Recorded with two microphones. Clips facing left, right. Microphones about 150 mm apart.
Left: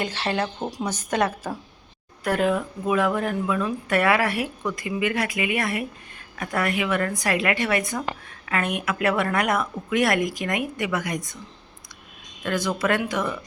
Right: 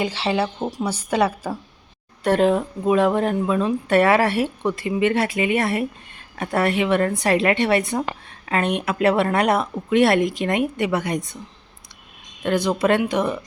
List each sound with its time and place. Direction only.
0.0 s a woman's voice: 10° right (ahead or behind)
2.2 s a woman's voice: 30° right (ahead or behind)
12.4 s a woman's voice: 25° right (ahead or behind)